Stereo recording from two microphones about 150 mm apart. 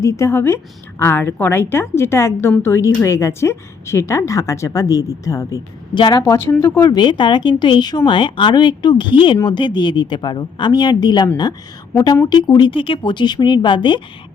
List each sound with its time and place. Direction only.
0.0 s a woman's voice: 20° left (ahead or behind)
12.3 s speech: 30° left (ahead or behind)